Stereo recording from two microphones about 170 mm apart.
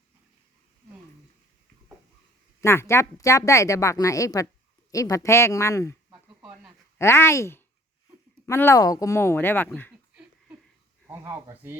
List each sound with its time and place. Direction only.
2.6 s a woman's voice: 15° left (ahead or behind)
7.0 s a woman's voice: 15° left (ahead or behind)
11.1 s speech: 15° right (ahead or behind)